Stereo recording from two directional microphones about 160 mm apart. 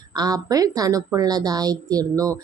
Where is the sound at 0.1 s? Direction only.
25° right (ahead or behind).